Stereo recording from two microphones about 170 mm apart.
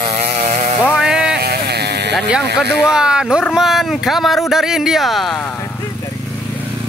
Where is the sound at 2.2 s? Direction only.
Centre (ahead or behind).